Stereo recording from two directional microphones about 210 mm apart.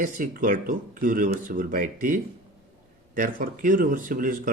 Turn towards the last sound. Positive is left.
turn(degrees=-40)  # may be behind; listen again after turning